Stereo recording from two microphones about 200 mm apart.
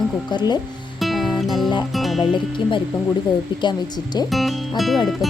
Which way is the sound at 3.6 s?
20° left (ahead or behind).